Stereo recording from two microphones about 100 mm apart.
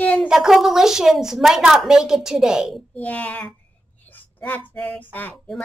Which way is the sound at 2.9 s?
15° left (ahead or behind).